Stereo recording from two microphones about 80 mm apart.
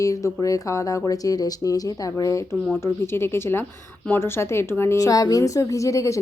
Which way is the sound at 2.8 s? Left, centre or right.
Left.